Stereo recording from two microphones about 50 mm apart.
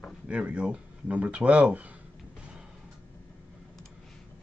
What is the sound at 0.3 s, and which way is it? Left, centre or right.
Speech, right.